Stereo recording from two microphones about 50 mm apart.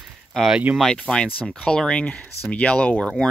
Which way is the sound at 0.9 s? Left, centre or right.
Centre.